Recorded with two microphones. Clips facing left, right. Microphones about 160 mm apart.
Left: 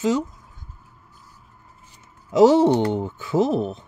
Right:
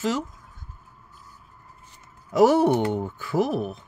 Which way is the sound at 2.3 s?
20° left (ahead or behind).